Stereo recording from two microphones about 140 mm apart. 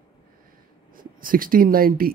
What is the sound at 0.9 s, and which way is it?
Speech, 90° right.